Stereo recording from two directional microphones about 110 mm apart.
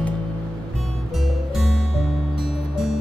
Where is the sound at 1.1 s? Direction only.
Centre (ahead or behind).